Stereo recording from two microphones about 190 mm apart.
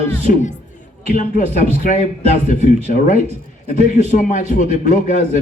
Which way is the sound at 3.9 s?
40° left (ahead or behind).